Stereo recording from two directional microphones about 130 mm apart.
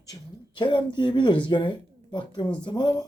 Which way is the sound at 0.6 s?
35° left (ahead or behind).